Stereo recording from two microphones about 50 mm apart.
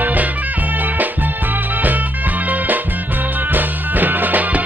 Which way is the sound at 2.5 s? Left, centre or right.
Right.